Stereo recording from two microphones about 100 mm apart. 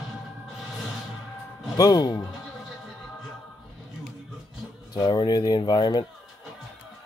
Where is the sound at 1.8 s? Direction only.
40° left (ahead or behind).